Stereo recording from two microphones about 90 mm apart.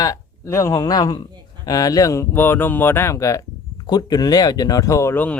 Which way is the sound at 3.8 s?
50° left (ahead or behind).